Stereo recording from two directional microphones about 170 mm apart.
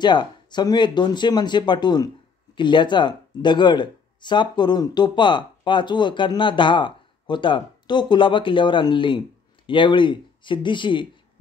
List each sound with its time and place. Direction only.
0.0 s speech: 25° left (ahead or behind)